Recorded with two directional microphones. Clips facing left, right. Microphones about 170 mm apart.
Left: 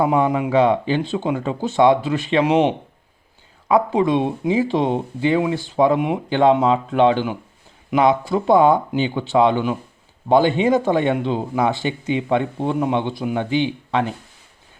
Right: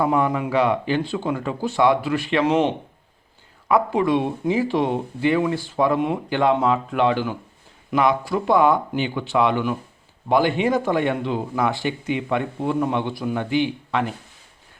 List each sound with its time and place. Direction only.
0.0 s speech: 20° left (ahead or behind)